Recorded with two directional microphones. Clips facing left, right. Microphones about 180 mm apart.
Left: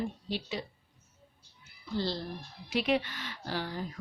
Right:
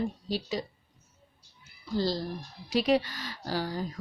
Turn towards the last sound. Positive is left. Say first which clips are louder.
# right 4 dB
turn(degrees=-40)  # may be behind; listen again after turning